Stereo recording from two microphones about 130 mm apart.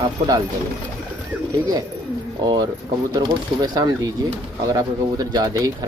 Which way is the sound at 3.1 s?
30° right (ahead or behind).